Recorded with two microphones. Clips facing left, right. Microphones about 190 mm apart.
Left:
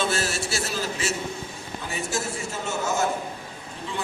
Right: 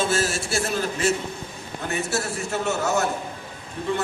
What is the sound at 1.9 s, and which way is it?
A man's voice, 65° right (ahead or behind).